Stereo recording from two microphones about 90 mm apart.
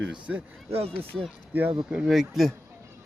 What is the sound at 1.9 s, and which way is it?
Speech, 5° right (ahead or behind).